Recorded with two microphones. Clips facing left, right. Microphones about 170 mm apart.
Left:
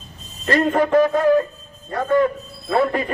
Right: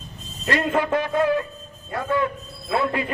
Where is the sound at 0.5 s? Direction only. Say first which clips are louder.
Left 6 dB; 45° left (ahead or behind).